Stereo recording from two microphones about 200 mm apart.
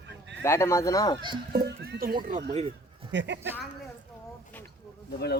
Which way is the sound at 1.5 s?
55° right (ahead or behind).